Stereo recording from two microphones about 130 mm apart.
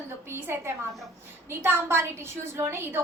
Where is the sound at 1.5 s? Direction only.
15° right (ahead or behind).